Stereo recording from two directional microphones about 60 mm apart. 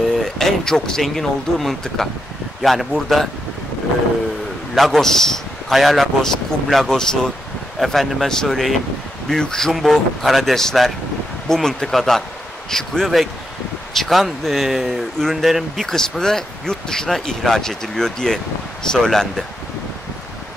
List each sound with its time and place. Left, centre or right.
0.2 s speech: centre
4.7 s a man's voice: centre